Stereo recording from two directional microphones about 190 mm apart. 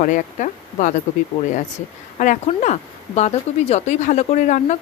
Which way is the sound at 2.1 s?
40° left (ahead or behind).